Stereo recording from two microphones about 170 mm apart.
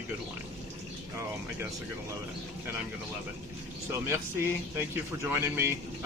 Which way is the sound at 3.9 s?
15° right (ahead or behind).